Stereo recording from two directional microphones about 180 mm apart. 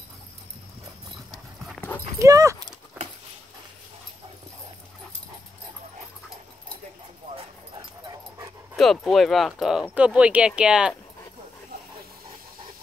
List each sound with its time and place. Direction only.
2.1 s horse: 20° right (ahead or behind)
8.7 s speech: centre (ahead or behind)